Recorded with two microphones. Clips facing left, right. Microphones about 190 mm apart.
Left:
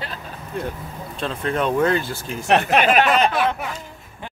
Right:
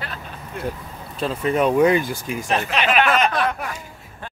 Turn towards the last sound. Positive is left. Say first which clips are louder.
# left 1 dB
turn(degrees=5)  # may be behind; listen again after turning